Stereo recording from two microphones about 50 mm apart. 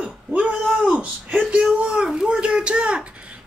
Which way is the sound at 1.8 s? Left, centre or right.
Centre.